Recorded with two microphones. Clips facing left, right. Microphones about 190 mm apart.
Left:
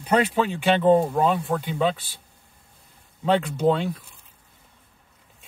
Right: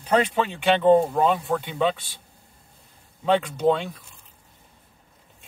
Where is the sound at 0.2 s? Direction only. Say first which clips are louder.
Left 1 dB; centre (ahead or behind).